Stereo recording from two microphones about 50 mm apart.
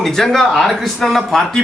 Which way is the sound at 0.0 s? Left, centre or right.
Centre.